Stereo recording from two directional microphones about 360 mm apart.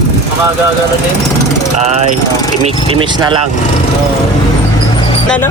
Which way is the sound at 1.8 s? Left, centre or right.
Centre.